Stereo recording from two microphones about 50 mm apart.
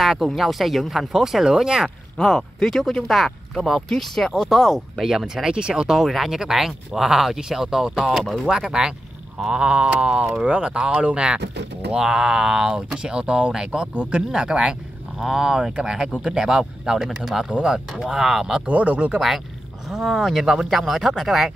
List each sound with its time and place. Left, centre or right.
0.0 s a sound: centre
0.4 s speech: centre
2.2 s speech: centre
17.5 s speech: right
17.7 s speech: centre
18.7 s speech: right
19.1 s speech: centre